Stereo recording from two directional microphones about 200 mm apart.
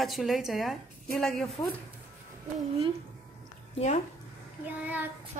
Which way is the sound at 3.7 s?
35° left (ahead or behind).